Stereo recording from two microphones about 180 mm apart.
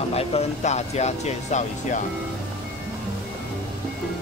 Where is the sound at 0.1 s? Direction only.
35° left (ahead or behind).